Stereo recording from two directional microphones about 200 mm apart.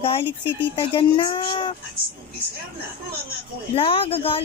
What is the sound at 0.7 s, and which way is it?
Speech, 25° left (ahead or behind).